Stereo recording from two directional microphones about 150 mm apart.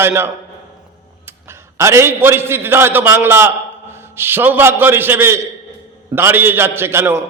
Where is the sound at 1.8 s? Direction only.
20° right (ahead or behind).